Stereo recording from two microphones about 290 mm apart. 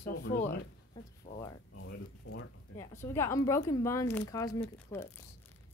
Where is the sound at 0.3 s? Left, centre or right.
Left.